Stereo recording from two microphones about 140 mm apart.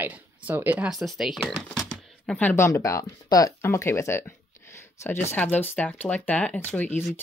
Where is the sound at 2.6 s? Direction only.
25° left (ahead or behind).